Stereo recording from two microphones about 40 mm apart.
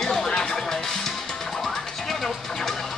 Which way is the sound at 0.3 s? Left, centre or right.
Centre.